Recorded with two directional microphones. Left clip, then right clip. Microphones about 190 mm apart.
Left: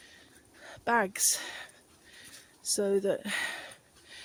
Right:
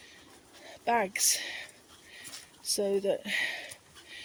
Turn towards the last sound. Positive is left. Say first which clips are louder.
# right 2 dB
turn(degrees=45)  # may be behind; listen again after turning